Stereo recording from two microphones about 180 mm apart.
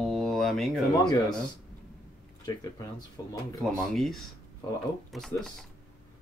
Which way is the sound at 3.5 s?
Centre (ahead or behind).